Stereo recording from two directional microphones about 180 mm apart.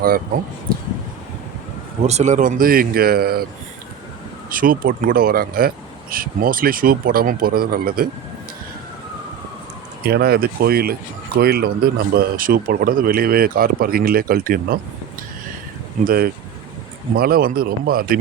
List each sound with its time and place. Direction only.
0.7 s a sound: 50° right (ahead or behind)
2.0 s speech: 40° right (ahead or behind); by 3.4 s 60° right (ahead or behind)
4.4 s speech: 50° right (ahead or behind)
10.0 s speech: 60° right (ahead or behind)
16.0 s speech: 55° right (ahead or behind)